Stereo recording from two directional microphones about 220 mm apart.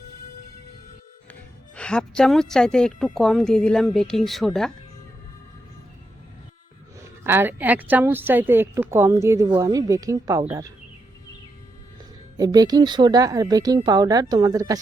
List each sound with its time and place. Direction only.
1.3 s a woman's voice: 5° left (ahead or behind)
7.0 s a woman's voice: 10° right (ahead or behind)
12.4 s a woman's voice: 15° right (ahead or behind)